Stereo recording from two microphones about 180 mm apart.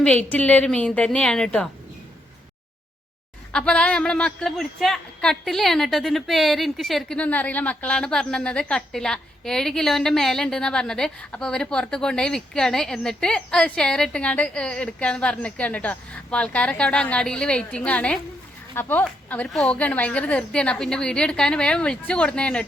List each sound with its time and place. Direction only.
0.0 s speech: 10° left (ahead or behind)
3.5 s speech: 5° left (ahead or behind)